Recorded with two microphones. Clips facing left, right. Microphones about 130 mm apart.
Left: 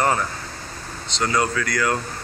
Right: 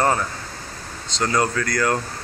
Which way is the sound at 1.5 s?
40° right (ahead or behind).